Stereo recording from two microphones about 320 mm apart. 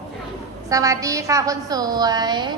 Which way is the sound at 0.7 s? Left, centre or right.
Centre.